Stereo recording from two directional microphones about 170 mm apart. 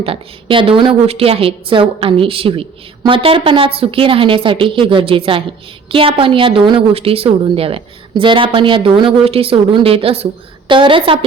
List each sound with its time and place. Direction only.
0.0 s a woman's voice: 30° right (ahead or behind)